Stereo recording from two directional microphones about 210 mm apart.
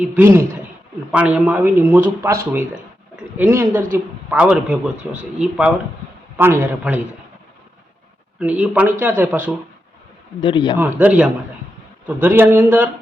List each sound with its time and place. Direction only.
0.2 s speech: 10° right (ahead or behind)
8.4 s speech: 5° right (ahead or behind)
10.4 s a man's voice: 20° left (ahead or behind)
10.8 s speech: 10° right (ahead or behind)